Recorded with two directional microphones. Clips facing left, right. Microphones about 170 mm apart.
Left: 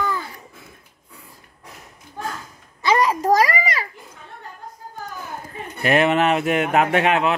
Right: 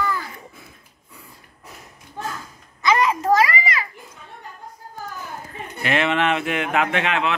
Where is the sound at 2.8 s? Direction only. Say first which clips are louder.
Left 1 dB; 35° left (ahead or behind).